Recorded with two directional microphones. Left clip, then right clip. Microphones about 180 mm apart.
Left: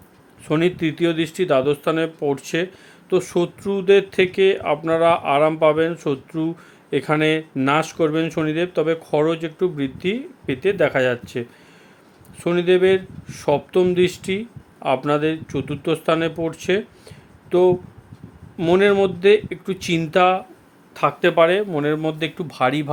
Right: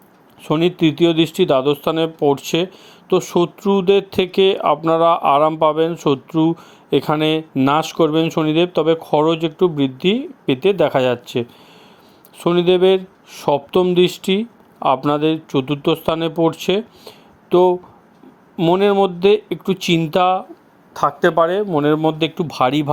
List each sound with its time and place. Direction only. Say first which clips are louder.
0.4 s speech: right 4 dB; 25° right (ahead or behind)
18.5 s speech: right 2 dB; 15° right (ahead or behind)
20.9 s speech: right 2 dB; centre (ahead or behind)
21.2 s speech: even; 20° right (ahead or behind)